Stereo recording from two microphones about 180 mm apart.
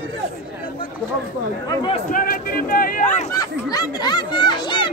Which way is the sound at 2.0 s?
50° left (ahead or behind).